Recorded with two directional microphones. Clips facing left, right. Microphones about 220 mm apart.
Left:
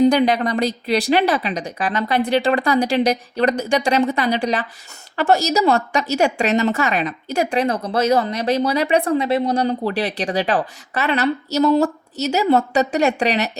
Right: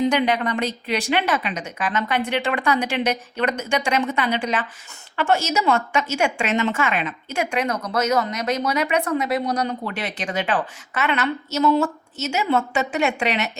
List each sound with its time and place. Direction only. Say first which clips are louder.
0.0 s a woman's voice: left 5 dB; 35° left (ahead or behind)